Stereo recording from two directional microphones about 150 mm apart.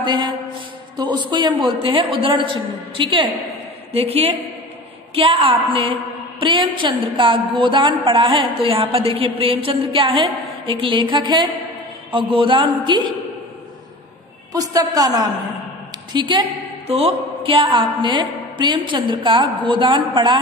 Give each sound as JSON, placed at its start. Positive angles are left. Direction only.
{"t": 0.0, "sound": "a man's voice", "side_deg": -30}
{"t": 14.5, "sound": "a man's voice", "side_deg": -25}